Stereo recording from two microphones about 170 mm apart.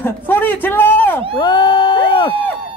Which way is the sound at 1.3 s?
25° left (ahead or behind).